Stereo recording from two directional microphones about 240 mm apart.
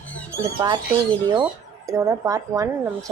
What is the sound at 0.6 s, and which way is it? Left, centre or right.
A woman's voice, centre.